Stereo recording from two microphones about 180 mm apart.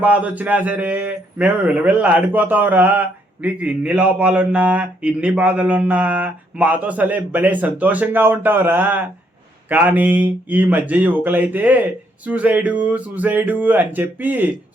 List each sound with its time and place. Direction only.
0.0 s a man's voice: 10° right (ahead or behind)